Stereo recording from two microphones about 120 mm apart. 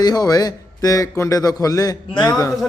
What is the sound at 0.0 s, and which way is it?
Speech, 35° left (ahead or behind).